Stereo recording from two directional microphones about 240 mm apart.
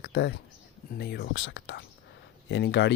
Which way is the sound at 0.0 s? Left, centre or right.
Left.